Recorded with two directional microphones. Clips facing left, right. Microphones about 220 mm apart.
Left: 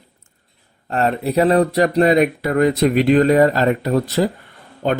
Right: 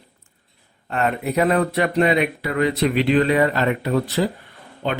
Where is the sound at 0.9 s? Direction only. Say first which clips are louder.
Left 3 dB; 35° left (ahead or behind).